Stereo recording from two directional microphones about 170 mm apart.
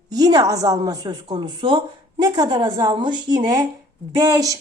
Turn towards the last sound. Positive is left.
turn(degrees=-20)  # may be behind; listen again after turning